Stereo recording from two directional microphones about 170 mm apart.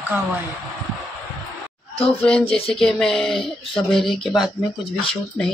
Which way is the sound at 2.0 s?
5° left (ahead or behind).